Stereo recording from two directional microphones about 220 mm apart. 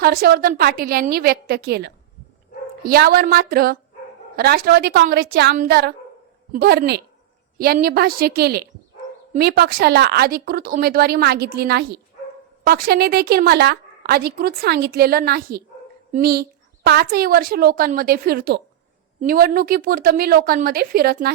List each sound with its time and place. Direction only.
0.0 s a woman's voice: 45° right (ahead or behind)